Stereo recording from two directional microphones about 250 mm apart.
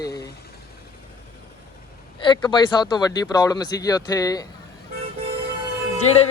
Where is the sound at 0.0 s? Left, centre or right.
Centre.